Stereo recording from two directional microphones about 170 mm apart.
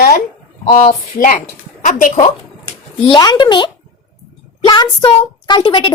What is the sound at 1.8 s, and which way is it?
Speech, 50° left (ahead or behind).